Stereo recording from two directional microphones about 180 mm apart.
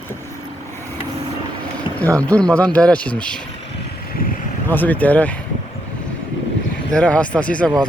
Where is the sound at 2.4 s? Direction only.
5° left (ahead or behind).